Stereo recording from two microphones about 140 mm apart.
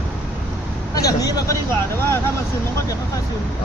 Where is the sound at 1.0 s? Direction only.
25° left (ahead or behind).